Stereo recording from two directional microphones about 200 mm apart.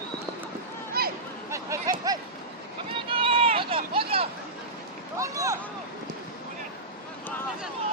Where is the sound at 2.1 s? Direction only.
15° right (ahead or behind).